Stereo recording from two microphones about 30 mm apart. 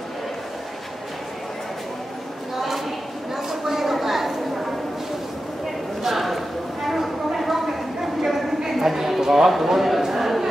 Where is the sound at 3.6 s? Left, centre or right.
Centre.